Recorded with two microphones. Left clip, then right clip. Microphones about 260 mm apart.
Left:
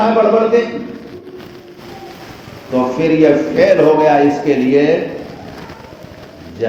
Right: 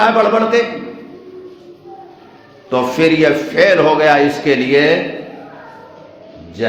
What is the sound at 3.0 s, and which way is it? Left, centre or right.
A man's voice, right.